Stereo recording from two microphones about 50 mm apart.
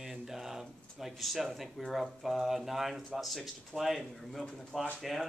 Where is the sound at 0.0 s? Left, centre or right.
Centre.